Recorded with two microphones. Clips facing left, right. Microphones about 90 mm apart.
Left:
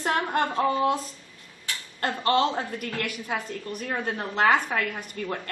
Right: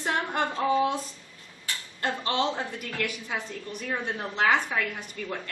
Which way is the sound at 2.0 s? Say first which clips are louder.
Left 4 dB; 50° left (ahead or behind).